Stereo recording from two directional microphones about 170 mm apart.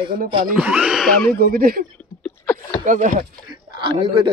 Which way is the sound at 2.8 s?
50° right (ahead or behind).